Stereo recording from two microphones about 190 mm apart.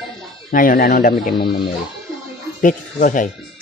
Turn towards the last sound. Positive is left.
turn(degrees=45)  # may be behind; listen again after turning